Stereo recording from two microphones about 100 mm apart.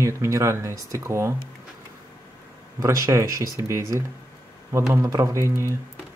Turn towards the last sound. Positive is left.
turn(degrees=-30)  # may be behind; listen again after turning